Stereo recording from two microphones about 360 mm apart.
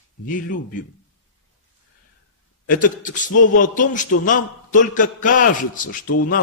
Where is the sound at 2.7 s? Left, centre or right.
Left.